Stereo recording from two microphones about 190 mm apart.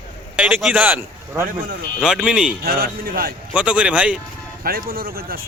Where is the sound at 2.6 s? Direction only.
55° right (ahead or behind).